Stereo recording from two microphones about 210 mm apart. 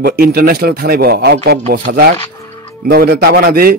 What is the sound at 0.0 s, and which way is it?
A man's voice, 45° right (ahead or behind).